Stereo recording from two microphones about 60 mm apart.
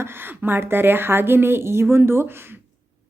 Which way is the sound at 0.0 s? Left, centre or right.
Right.